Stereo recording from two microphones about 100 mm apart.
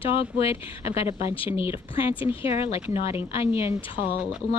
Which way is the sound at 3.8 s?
60° left (ahead or behind).